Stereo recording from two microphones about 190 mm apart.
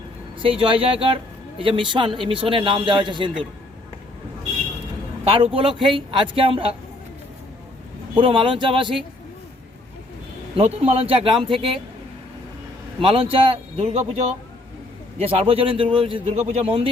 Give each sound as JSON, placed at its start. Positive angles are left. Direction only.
{"t": 0.4, "sound": "a woman's voice", "side_deg": -30}
{"t": 5.2, "sound": "a man's voice", "side_deg": -30}
{"t": 8.1, "sound": "a woman's voice", "side_deg": -25}
{"t": 10.6, "sound": "a woman's voice", "side_deg": -30}
{"t": 13.0, "sound": "a woman's voice", "side_deg": -30}
{"t": 15.2, "sound": "a woman's voice", "side_deg": -30}